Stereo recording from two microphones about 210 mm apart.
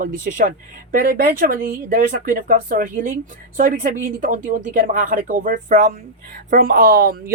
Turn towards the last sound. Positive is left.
turn(degrees=-45)  # may be behind; listen again after turning